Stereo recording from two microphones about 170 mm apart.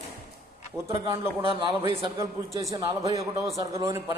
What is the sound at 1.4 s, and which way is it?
Speech, 30° right (ahead or behind).